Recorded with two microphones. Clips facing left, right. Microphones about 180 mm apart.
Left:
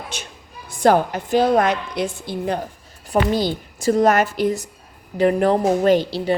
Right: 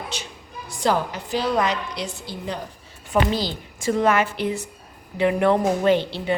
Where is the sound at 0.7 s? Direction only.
55° left (ahead or behind).